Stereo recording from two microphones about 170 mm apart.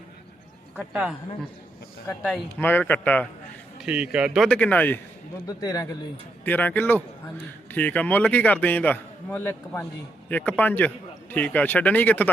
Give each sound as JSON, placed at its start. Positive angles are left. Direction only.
{"t": 0.8, "sound": "speech", "side_deg": -5}
{"t": 2.1, "sound": "a man's voice", "side_deg": 20}
{"t": 3.8, "sound": "speech", "side_deg": -5}
{"t": 4.4, "sound": "a man's voice", "side_deg": 10}
{"t": 5.5, "sound": "a man's voice", "side_deg": 20}